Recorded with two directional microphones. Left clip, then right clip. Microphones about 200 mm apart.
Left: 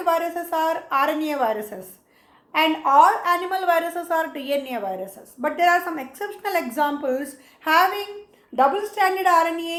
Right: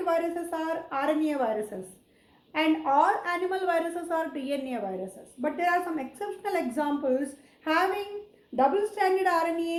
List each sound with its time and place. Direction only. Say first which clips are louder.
0.0 s a woman's voice: left 5 dB; 15° left (ahead or behind)